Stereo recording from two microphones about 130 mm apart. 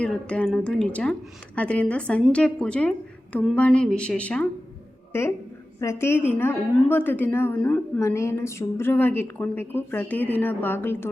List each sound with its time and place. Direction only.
0.0 s a woman's voice: 10° left (ahead or behind)
5.8 s a woman's voice: 20° left (ahead or behind)